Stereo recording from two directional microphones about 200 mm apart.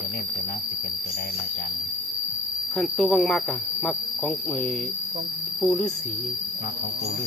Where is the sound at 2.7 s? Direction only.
Centre (ahead or behind).